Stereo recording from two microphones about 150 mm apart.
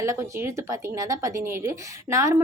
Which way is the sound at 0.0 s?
20° right (ahead or behind).